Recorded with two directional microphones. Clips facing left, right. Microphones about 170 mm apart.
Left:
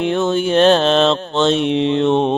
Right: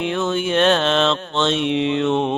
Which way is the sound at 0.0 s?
35° left (ahead or behind).